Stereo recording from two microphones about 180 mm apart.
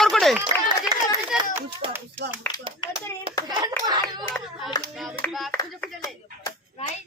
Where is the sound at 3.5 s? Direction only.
20° right (ahead or behind).